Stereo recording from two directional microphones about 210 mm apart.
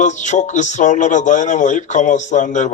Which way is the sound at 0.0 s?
35° left (ahead or behind).